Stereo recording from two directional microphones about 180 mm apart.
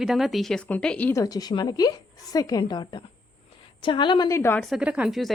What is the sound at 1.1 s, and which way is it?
A woman's voice, 20° left (ahead or behind).